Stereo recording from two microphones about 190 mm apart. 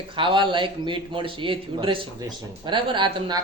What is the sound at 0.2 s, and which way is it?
A man's voice, 25° right (ahead or behind).